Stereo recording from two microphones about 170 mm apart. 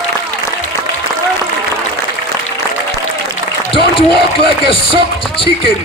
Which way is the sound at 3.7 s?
30° left (ahead or behind).